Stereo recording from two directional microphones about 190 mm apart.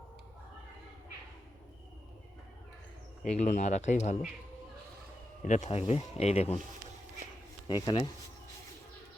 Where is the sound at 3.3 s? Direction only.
40° left (ahead or behind).